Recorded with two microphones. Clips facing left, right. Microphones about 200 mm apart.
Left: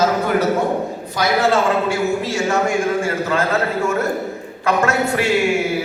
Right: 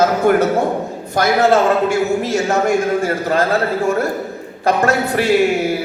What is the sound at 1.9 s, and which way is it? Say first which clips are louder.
A man's voice: right 3 dB; 40° right (ahead or behind).